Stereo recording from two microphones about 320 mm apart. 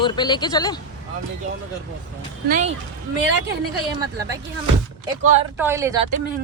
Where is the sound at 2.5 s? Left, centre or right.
Right.